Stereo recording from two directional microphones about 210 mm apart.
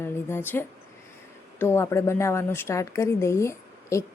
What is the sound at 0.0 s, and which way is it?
A woman's voice, 10° left (ahead or behind).